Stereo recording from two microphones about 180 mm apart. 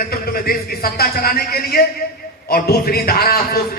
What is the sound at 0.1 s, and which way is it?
A man's voice, 55° left (ahead or behind).